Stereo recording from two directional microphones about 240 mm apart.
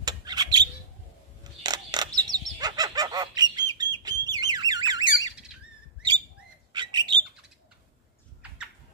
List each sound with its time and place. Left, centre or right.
0.0 s a sound: centre
3.8 s bird: centre
6.7 s bird: centre